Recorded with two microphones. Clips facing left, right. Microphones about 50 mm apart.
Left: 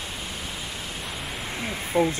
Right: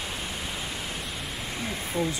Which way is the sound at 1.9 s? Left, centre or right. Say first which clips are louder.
Left 7 dB; left.